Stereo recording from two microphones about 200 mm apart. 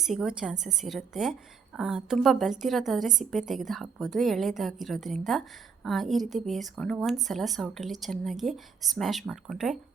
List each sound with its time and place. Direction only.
0.0 s a woman's voice: centre (ahead or behind)